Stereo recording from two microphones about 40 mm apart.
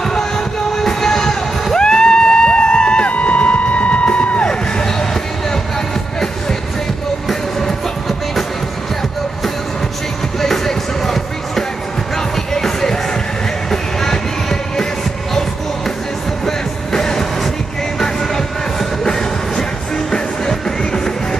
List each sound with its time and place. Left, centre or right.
0.7 s music: centre
3.1 s music: left
4.5 s vehicle: centre
10.4 s music: centre
16.4 s music: centre